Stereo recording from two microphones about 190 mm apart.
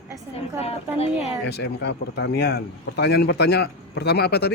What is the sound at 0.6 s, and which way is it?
Speech, 30° left (ahead or behind).